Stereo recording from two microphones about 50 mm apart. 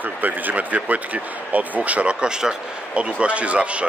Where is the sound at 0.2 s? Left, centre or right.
Right.